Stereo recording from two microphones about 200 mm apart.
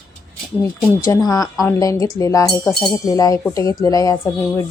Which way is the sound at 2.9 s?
15° left (ahead or behind).